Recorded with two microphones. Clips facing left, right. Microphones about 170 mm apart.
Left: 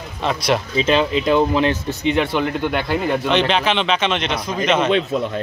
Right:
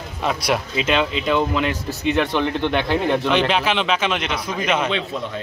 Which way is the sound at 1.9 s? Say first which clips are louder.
Left 1 dB; 20° left (ahead or behind).